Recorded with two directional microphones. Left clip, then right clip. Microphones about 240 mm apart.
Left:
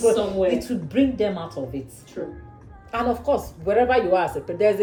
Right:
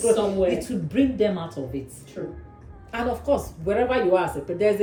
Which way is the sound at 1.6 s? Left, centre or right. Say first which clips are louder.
Left 2 dB; centre.